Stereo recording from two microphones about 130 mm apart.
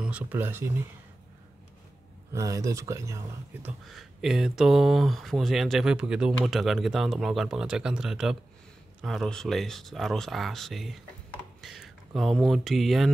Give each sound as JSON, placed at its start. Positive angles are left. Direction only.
{"t": 0.0, "sound": "speech", "side_deg": -10}
{"t": 2.3, "sound": "speech", "side_deg": -25}
{"t": 3.8, "sound": "speech", "side_deg": 0}